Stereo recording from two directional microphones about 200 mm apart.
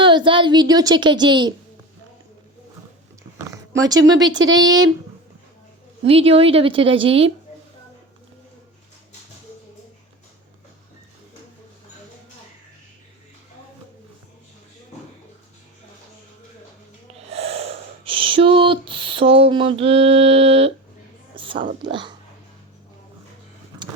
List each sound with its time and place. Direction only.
0.0 s a child's voice: 25° right (ahead or behind)
3.9 s speech: 65° right (ahead or behind)
6.1 s a child's voice: 30° right (ahead or behind)
17.2 s speech: 30° right (ahead or behind)
21.3 s whispering: 25° right (ahead or behind)
21.8 s a child's voice: 25° right (ahead or behind)